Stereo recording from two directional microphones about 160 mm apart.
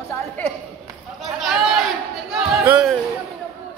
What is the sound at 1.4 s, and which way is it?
Speech, centre (ahead or behind).